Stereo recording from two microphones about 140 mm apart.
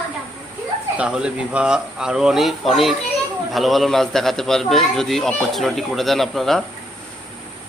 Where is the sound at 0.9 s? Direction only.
5° right (ahead or behind).